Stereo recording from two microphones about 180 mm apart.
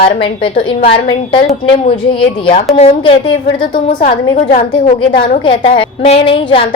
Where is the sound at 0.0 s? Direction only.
30° left (ahead or behind).